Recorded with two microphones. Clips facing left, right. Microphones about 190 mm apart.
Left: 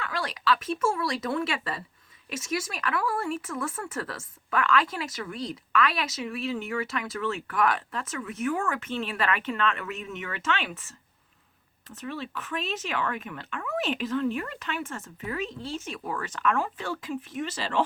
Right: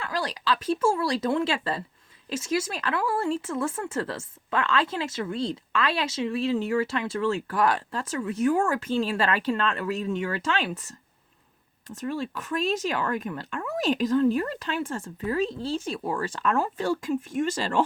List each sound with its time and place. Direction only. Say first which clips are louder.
0.0 s speech: right 1 dB; 35° right (ahead or behind)
11.9 s speech: right 5 dB; 40° right (ahead or behind)